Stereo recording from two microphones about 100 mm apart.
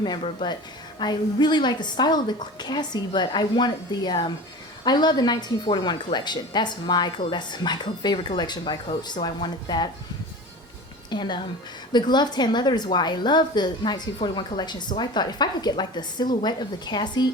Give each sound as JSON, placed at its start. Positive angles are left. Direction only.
{"t": 0.9, "sound": "a woman's voice", "side_deg": 45}
{"t": 11.1, "sound": "a woman's voice", "side_deg": 50}